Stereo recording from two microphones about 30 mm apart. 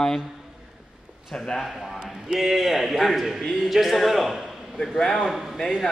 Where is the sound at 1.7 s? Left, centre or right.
Centre.